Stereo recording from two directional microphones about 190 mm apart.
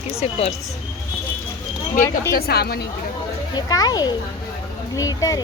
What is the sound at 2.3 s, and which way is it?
Speech, 55° left (ahead or behind).